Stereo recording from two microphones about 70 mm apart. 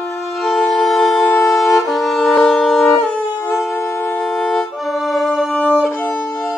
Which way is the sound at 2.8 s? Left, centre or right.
Centre.